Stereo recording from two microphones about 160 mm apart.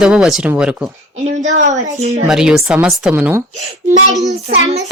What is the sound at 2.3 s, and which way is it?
Speech, 5° right (ahead or behind).